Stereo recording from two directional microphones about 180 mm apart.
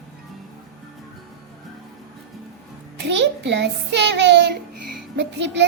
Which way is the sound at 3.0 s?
75° right (ahead or behind).